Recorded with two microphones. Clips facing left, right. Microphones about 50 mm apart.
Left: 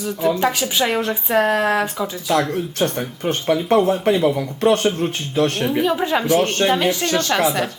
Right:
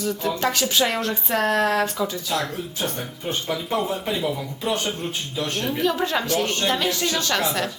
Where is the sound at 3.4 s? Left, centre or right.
Left.